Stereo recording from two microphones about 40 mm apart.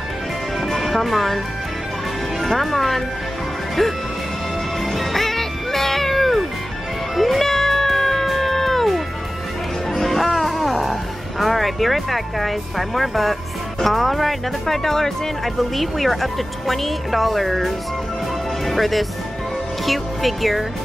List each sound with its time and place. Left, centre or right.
0.6 s music: centre
2.4 s speech: centre
4.8 s music: centre
9.9 s music: centre
13.7 s speech: centre